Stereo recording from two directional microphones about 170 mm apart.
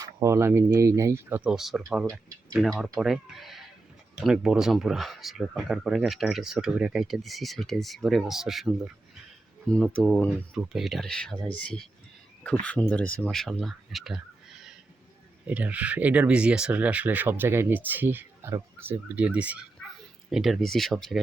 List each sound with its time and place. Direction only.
0.0 s speech: 15° right (ahead or behind)
1.5 s speech: centre (ahead or behind)
15.4 s speech: 10° right (ahead or behind)